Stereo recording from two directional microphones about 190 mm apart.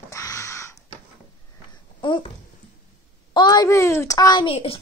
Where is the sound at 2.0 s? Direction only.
25° left (ahead or behind).